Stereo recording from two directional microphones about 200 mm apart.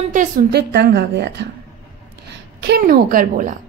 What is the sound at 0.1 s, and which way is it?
A woman's voice, 45° right (ahead or behind).